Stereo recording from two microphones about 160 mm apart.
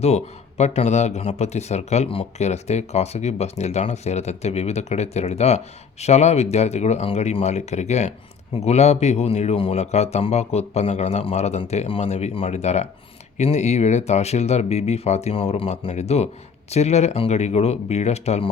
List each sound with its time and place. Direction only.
0.0 s speech: 40° left (ahead or behind)